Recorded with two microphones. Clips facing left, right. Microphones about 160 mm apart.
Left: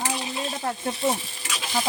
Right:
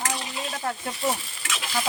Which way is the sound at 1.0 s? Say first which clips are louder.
Left 2 dB; 25° left (ahead or behind).